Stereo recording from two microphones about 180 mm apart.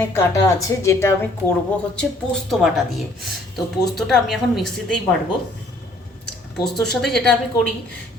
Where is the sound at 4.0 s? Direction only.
Centre (ahead or behind).